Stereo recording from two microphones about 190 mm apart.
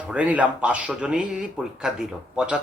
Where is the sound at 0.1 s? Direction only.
5° right (ahead or behind).